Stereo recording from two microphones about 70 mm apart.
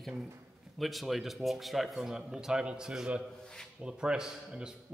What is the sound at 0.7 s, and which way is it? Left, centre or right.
A man's voice, centre.